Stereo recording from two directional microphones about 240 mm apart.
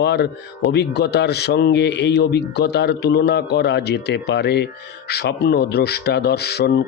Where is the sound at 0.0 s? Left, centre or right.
Left.